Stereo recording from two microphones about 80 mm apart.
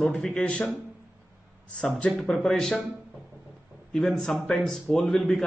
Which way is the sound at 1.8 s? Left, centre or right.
Centre.